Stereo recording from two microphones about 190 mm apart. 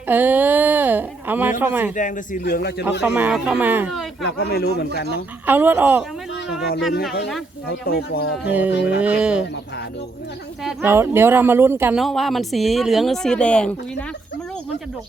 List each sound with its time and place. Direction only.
0.1 s speech: 10° right (ahead or behind)
2.0 s a man's voice: 45° left (ahead or behind); by 2.8 s 60° left (ahead or behind)
3.0 s speech: 10° right (ahead or behind)
4.2 s speech: 60° left (ahead or behind)
5.5 s speech: 10° right (ahead or behind)
7.9 s speech: 55° left (ahead or behind)
8.4 s speech: 10° right (ahead or behind)
8.7 s speech: 65° left (ahead or behind)
9.0 s speech: 5° right (ahead or behind)
10.6 s speech: centre (ahead or behind)
10.9 s speech: 10° right (ahead or behind); by 13.7 s 5° left (ahead or behind)